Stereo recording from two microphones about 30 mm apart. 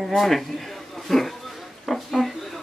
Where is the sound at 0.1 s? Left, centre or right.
Centre.